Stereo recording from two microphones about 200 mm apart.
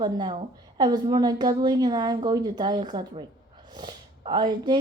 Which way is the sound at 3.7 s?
20° right (ahead or behind).